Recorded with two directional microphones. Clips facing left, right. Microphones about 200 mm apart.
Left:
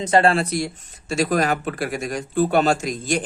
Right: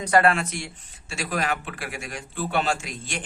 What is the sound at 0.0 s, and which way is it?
Speech, 25° left (ahead or behind).